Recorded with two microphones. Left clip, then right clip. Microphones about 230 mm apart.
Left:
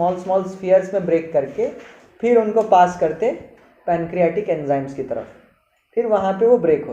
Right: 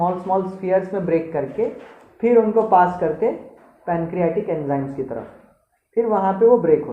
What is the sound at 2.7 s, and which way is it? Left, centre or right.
A woman's voice, centre.